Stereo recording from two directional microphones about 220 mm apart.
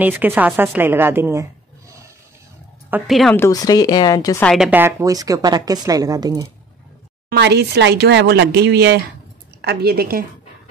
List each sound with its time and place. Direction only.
0.0 s a woman's voice: 10° right (ahead or behind)
2.9 s speech: centre (ahead or behind)
3.3 s a woman's voice: 15° left (ahead or behind)
4.5 s a woman's voice: 5° right (ahead or behind)
7.2 s speech: 50° right (ahead or behind)